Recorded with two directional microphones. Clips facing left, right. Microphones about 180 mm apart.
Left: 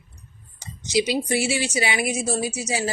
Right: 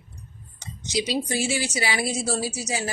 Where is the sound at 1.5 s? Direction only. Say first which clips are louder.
Left 2 dB; 20° left (ahead or behind).